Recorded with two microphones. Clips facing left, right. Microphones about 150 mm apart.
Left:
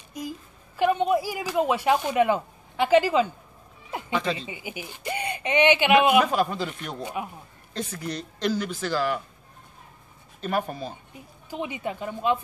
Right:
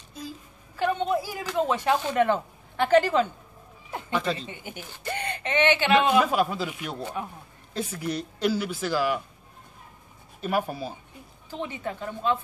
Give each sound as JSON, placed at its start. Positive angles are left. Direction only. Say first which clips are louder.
{"t": 0.2, "sound": "a sound", "louder": "left 4 dB", "side_deg": 15}
{"t": 0.7, "sound": "speech", "louder": "left 3 dB", "side_deg": 10}
{"t": 6.2, "sound": "speech", "louder": "even", "side_deg": -5}
{"t": 7.0, "sound": "speech", "louder": "left 3 dB", "side_deg": 15}
{"t": 7.7, "sound": "speech", "louder": "right 2 dB", "side_deg": -5}
{"t": 10.4, "sound": "speech", "louder": "even", "side_deg": -5}
{"t": 11.5, "sound": "speech", "louder": "left 2 dB", "side_deg": 15}